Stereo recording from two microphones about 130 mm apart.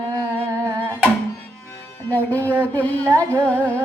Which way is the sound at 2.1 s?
15° left (ahead or behind).